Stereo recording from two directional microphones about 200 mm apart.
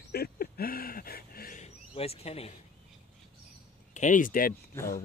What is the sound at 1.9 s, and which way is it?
Speech, 30° left (ahead or behind).